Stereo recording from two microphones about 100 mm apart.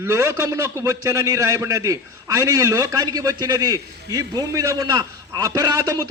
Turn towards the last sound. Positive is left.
turn(degrees=-35)  # may be behind; listen again after turning